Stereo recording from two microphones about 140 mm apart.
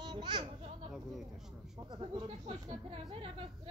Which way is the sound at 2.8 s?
40° right (ahead or behind).